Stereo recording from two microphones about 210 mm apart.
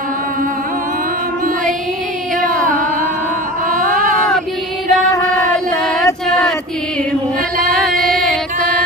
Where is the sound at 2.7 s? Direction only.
40° right (ahead or behind).